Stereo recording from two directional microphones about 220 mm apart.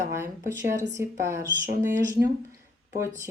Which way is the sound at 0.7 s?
35° right (ahead or behind).